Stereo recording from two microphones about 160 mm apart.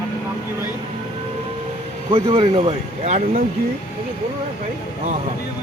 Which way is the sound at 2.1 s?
35° right (ahead or behind).